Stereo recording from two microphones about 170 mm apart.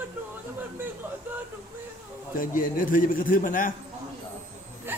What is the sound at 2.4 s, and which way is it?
A man's voice, 50° left (ahead or behind).